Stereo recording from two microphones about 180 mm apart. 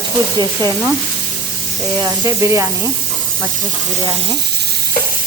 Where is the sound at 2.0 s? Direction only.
15° right (ahead or behind).